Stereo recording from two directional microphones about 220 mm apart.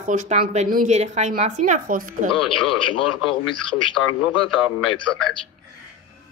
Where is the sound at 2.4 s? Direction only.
90° left.